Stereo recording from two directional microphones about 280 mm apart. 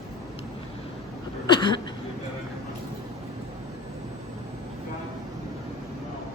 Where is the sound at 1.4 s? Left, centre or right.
Centre.